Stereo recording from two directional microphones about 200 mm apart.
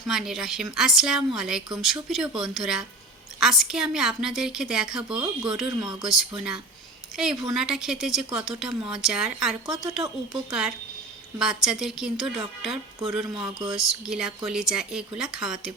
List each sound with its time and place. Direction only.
0.1 s a woman's voice: centre (ahead or behind)
5.1 s speech: 20° right (ahead or behind)
5.5 s a woman's voice: centre (ahead or behind)
7.5 s a woman's voice: centre (ahead or behind)
13.2 s speech: 20° right (ahead or behind)
13.7 s a woman's voice: centre (ahead or behind)